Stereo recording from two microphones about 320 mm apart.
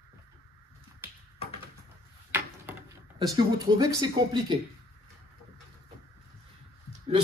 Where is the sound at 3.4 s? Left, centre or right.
Centre.